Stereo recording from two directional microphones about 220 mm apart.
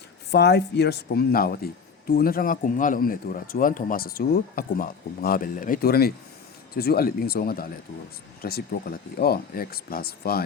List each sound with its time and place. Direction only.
0.3 s speech: 50° left (ahead or behind)